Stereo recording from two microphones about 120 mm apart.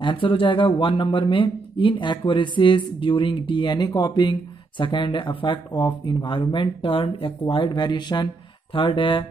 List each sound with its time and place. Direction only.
0.0 s speech: 45° left (ahead or behind)